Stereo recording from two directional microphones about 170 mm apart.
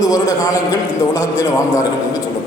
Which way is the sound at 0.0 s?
20° left (ahead or behind).